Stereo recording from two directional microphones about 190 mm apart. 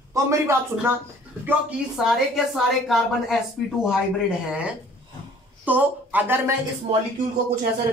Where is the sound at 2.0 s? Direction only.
5° right (ahead or behind).